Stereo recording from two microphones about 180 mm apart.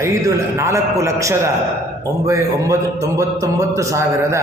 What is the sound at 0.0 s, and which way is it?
A man's voice, 15° right (ahead or behind).